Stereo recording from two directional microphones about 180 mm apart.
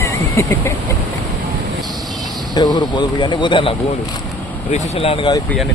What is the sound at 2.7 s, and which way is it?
Speech, 25° left (ahead or behind).